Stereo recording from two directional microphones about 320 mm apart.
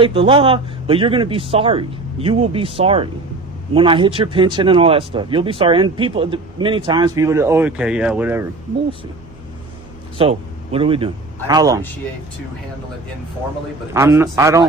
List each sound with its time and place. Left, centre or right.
0.0 s speech: centre
10.2 s a man's voice: centre
13.9 s speech: centre